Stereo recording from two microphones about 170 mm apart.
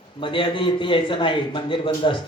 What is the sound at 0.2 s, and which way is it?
Speech, 30° left (ahead or behind).